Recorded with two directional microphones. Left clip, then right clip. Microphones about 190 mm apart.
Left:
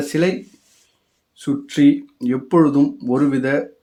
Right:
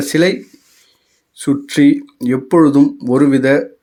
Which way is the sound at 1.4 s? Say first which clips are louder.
Right 4 dB; 20° right (ahead or behind).